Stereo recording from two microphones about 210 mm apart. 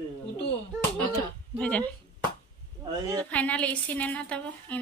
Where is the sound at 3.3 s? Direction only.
5° left (ahead or behind).